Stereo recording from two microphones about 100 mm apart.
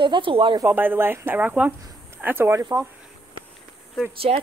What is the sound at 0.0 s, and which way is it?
Speech, 55° right (ahead or behind).